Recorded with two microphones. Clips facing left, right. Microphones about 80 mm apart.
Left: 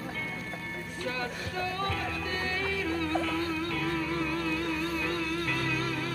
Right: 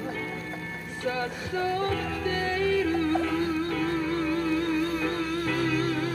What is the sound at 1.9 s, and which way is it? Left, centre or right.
Music, right.